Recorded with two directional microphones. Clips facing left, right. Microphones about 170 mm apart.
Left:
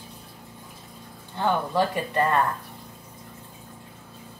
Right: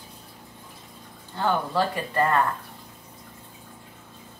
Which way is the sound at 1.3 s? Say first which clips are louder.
Left 1 dB; 15° left (ahead or behind).